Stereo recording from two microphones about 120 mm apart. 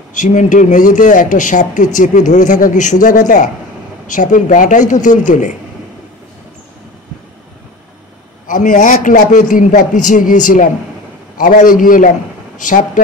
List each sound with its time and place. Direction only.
0.1 s a man's voice: 90° left
8.5 s a man's voice: 90° left